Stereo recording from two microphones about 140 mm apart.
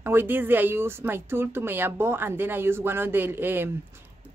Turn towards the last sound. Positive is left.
turn(degrees=-15)  # may be behind; listen again after turning